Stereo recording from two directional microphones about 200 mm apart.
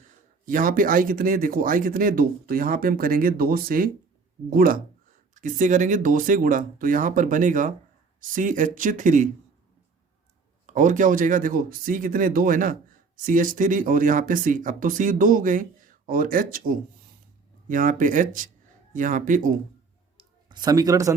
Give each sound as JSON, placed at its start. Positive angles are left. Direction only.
{"t": 0.4, "sound": "speech", "side_deg": -45}
{"t": 10.7, "sound": "speech", "side_deg": -40}
{"t": 20.5, "sound": "speech", "side_deg": -20}